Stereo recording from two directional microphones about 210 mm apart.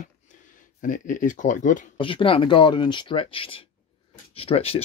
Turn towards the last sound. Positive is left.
turn(degrees=30)  # may be behind; listen again after turning